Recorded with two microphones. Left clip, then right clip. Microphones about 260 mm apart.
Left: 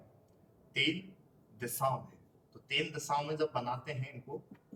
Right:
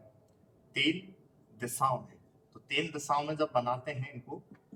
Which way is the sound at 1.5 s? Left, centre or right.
Centre.